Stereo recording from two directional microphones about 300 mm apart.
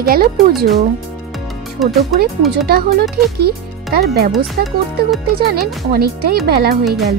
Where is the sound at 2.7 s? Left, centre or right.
Right.